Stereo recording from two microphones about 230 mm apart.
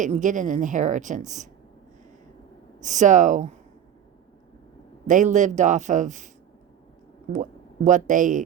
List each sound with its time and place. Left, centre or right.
0.0 s a woman's voice: right
2.8 s a woman's voice: right
5.0 s a woman's voice: right
7.9 s a woman's voice: right